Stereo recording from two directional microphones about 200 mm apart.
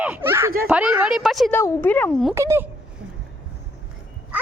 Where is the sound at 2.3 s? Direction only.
15° right (ahead or behind).